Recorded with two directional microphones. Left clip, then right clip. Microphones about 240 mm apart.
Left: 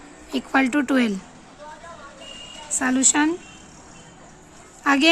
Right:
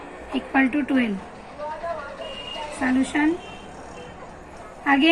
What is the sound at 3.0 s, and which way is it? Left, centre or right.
Speech, left.